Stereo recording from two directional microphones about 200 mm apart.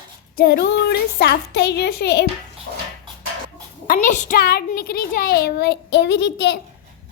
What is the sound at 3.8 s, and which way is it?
A child's voice, 45° left (ahead or behind).